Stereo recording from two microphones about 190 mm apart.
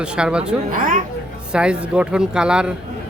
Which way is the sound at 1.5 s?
5° right (ahead or behind).